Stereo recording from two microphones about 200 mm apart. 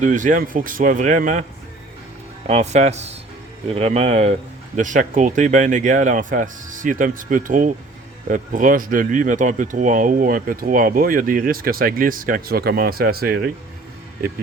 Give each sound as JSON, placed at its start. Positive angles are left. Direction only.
{"t": 0.0, "sound": "speech", "side_deg": -40}
{"t": 2.5, "sound": "speech", "side_deg": -35}